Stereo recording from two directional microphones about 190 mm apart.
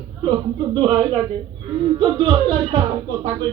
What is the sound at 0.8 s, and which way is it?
Speech, 25° right (ahead or behind).